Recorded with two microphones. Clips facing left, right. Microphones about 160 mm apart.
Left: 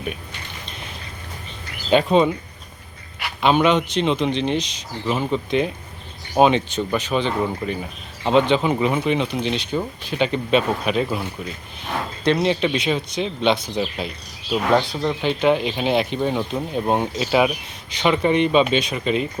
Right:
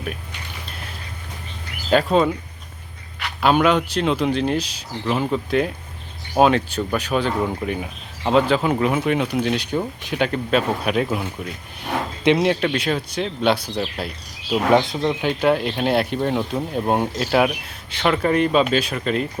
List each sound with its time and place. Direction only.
1.9 s speech: centre (ahead or behind)
3.4 s speech: 5° right (ahead or behind)
12.6 s speech: 10° left (ahead or behind)